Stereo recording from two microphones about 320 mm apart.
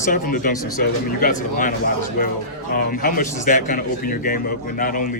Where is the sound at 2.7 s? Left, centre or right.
Left.